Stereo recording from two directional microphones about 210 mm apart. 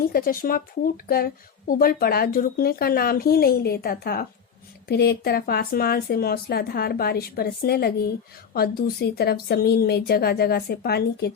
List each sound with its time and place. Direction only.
0.0 s speech: 45° left (ahead or behind)